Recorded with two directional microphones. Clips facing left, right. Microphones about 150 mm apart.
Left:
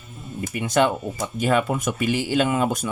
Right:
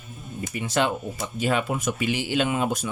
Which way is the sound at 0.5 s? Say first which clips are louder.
Left 4 dB; 50° left (ahead or behind).